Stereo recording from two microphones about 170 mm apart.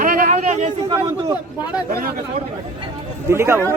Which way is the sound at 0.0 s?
50° right (ahead or behind).